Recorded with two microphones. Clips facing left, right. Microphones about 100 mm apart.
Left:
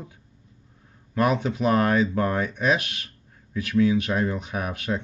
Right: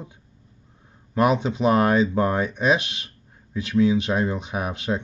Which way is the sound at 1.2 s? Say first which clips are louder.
Right 2 dB; 20° right (ahead or behind).